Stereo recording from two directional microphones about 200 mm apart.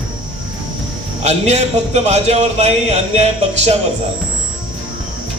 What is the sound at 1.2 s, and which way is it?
A man's voice, 35° right (ahead or behind).